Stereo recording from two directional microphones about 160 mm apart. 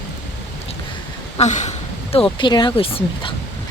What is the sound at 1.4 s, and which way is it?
Speech, 45° left (ahead or behind).